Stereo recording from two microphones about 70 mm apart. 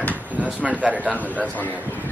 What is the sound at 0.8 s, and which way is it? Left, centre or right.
Speech, right.